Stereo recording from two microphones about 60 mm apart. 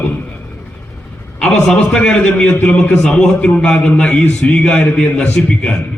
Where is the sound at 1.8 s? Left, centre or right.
Centre.